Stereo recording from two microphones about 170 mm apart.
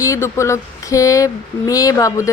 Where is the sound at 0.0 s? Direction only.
20° left (ahead or behind).